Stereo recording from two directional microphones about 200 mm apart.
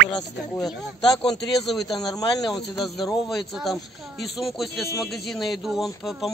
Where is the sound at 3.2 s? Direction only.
Centre (ahead or behind).